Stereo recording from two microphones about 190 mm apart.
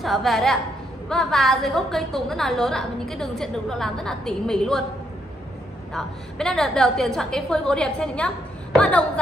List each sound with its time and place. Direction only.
0.0 s a woman's voice: centre (ahead or behind)
5.9 s a woman's voice: 5° left (ahead or behind)